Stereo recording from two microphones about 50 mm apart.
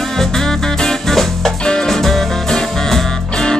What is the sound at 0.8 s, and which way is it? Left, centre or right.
Music, centre.